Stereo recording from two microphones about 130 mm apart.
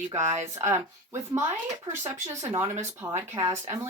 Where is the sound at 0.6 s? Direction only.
20° right (ahead or behind).